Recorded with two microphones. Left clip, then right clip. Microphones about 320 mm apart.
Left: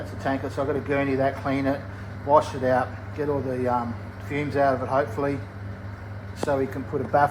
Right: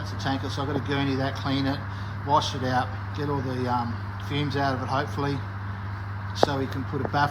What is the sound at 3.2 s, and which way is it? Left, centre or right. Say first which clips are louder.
Speech: left 4 dB; centre.